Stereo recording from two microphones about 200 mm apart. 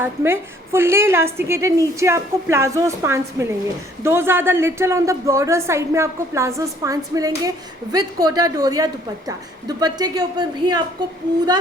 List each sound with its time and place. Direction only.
0.0 s a woman's voice: 10° right (ahead or behind)